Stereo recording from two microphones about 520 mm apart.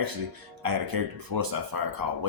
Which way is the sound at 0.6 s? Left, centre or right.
Right.